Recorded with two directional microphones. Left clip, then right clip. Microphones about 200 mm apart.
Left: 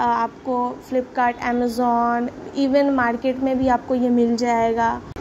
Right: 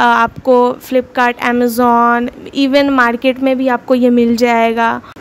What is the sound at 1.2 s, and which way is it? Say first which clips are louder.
Speech: right 7 dB; 70° right (ahead or behind).